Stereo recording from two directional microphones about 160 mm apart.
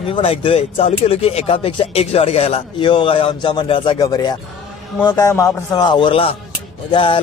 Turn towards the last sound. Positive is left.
turn(degrees=30)  # may be behind; listen again after turning